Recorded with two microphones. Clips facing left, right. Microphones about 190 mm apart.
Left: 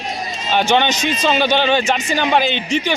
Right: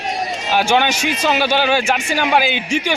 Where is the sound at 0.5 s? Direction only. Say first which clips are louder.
Even; 5° right (ahead or behind).